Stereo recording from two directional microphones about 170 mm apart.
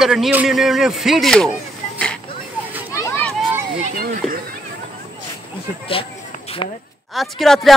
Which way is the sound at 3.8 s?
55° right (ahead or behind).